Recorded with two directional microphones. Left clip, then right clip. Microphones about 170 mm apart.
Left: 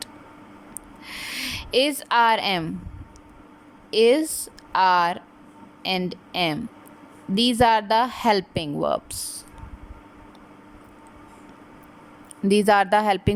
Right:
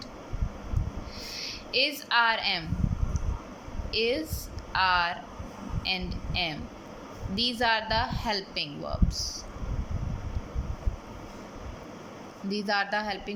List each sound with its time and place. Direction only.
1.1 s a sound: 40° left (ahead or behind)
3.9 s a woman's voice: 35° left (ahead or behind)
12.5 s a woman's voice: 40° left (ahead or behind)